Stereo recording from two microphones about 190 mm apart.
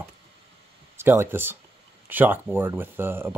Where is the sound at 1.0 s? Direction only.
10° right (ahead or behind).